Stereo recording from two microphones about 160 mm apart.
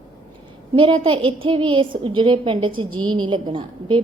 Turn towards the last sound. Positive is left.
turn(degrees=-30)  # may be behind; listen again after turning